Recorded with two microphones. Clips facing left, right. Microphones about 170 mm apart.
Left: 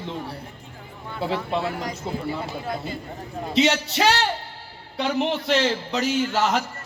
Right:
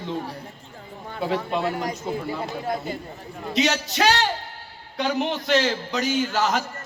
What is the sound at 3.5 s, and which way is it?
A man's voice, 25° left (ahead or behind).